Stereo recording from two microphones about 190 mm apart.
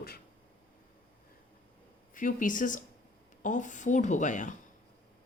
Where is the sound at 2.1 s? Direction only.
45° left (ahead or behind).